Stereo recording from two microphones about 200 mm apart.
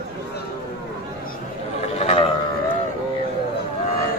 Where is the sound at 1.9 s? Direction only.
30° left (ahead or behind).